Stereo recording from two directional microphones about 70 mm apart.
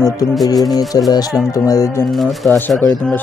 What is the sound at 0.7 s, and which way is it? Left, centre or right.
Speech, left.